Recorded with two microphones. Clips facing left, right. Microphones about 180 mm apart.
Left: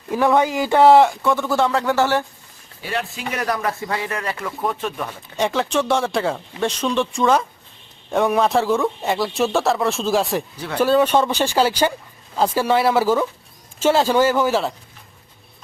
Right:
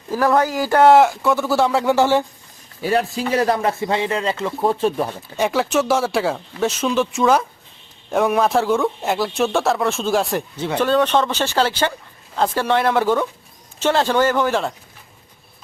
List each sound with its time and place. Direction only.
0.1 s speech: centre (ahead or behind)
0.4 s speech: 20° left (ahead or behind)
0.7 s speech: centre (ahead or behind); by 2.2 s 15° right (ahead or behind)
2.8 s a man's voice: 40° right (ahead or behind)
5.4 s speech: 5° right (ahead or behind)